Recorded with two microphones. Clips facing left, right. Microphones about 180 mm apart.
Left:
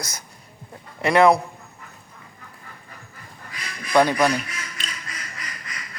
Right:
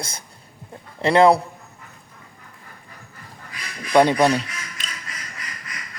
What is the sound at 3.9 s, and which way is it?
Speech, 20° right (ahead or behind).